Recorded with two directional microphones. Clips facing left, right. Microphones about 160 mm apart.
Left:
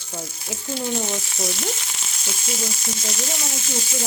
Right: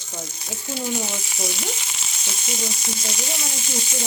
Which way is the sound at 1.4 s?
Centre (ahead or behind).